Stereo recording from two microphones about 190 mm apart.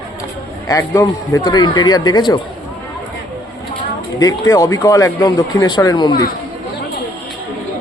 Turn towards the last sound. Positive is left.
turn(degrees=20)  # may be behind; listen again after turning